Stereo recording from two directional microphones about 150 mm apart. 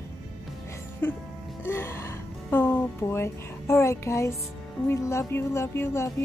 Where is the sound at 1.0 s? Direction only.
15° left (ahead or behind).